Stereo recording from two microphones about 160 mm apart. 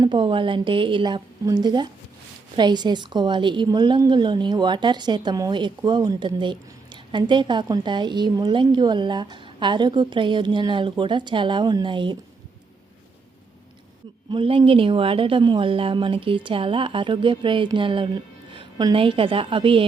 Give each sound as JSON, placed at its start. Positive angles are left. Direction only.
{"t": 0.0, "sound": "a woman's voice", "side_deg": -30}
{"t": 14.3, "sound": "speech", "side_deg": -35}